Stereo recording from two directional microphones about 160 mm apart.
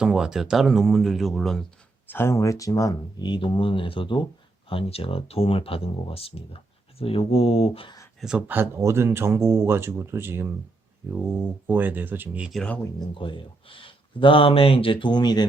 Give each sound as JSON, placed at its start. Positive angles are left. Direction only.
{"t": 0.0, "sound": "speech", "side_deg": -5}
{"t": 2.0, "sound": "speech", "side_deg": 15}
{"t": 8.2, "sound": "speech", "side_deg": -5}
{"t": 12.5, "sound": "speech", "side_deg": 5}
{"t": 13.0, "sound": "speech", "side_deg": 30}